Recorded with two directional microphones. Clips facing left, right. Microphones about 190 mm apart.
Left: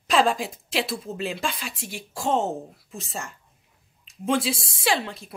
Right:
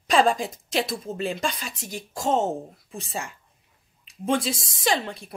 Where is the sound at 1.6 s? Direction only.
40° right (ahead or behind).